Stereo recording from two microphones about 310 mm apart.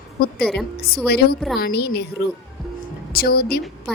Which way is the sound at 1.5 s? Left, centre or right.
Left.